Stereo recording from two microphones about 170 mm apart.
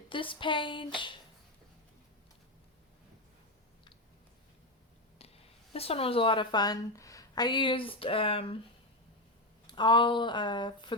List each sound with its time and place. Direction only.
0.1 s speech: 30° left (ahead or behind)
5.1 s speech: 35° left (ahead or behind)
9.6 s speech: 25° left (ahead or behind)